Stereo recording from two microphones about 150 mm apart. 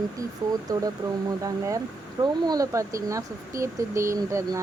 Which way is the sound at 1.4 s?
20° right (ahead or behind).